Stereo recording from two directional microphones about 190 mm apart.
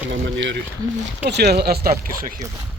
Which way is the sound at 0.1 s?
70° right (ahead or behind).